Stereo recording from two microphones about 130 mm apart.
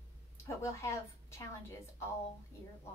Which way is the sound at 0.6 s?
20° left (ahead or behind).